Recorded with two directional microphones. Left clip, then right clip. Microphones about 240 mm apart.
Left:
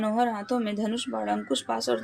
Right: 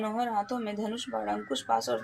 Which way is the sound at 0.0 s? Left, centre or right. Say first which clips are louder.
Left 3 dB; left.